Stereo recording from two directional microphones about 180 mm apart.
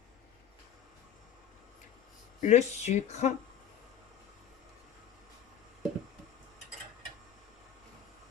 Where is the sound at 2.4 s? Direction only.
40° left (ahead or behind).